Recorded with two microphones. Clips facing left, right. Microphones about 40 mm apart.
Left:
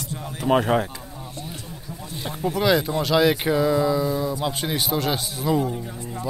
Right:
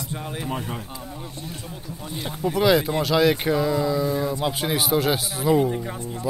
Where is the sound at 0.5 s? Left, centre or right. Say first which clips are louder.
Left 15 dB; left.